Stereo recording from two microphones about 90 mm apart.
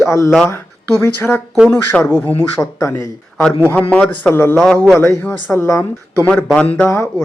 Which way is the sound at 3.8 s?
10° left (ahead or behind).